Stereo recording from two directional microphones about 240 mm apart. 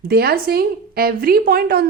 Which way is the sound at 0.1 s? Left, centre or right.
Right.